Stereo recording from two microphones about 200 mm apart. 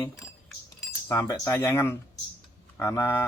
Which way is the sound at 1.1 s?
15° left (ahead or behind).